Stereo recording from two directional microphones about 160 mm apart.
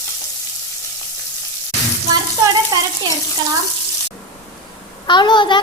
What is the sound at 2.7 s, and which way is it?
Frying, 25° right (ahead or behind).